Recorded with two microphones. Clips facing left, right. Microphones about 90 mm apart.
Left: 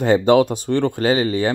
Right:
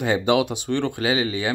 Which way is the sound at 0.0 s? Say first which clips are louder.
Left 6 dB; 45° left (ahead or behind).